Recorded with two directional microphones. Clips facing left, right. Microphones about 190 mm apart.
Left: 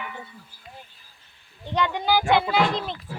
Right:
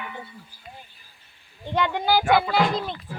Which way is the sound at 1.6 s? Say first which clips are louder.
Right 1 dB; 10° right (ahead or behind).